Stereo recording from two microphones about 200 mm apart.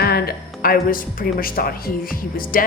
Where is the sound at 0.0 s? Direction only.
50° left (ahead or behind).